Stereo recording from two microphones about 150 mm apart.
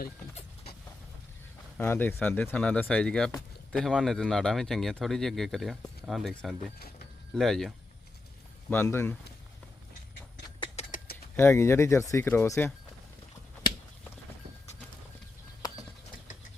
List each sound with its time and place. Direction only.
1.8 s speech: 15° left (ahead or behind)
8.7 s speech: 15° left (ahead or behind)
10.8 s a sound: 45° left (ahead or behind)
11.3 s speech: 15° left (ahead or behind)